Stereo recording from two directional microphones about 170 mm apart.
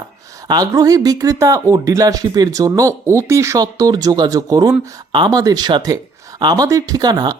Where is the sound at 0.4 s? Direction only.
20° right (ahead or behind).